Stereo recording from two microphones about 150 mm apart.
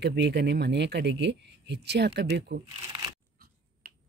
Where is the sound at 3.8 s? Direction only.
75° right (ahead or behind).